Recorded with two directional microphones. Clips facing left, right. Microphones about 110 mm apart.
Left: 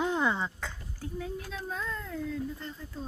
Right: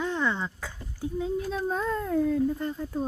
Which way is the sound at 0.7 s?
15° right (ahead or behind).